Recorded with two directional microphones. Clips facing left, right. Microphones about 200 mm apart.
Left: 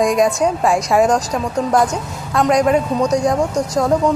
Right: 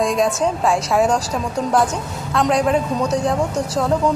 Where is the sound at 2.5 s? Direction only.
5° right (ahead or behind).